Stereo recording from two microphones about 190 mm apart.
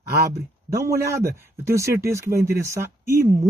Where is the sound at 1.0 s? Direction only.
15° right (ahead or behind).